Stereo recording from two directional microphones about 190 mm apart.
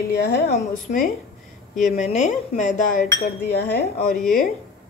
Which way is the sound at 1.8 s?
40° left (ahead or behind).